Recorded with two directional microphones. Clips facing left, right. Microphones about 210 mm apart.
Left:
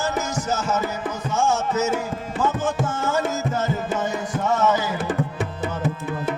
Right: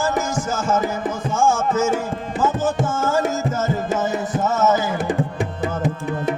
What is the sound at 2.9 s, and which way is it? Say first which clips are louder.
Music: right 3 dB; 45° right (ahead or behind).